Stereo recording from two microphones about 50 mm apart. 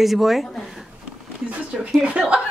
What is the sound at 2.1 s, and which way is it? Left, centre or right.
Speech, right.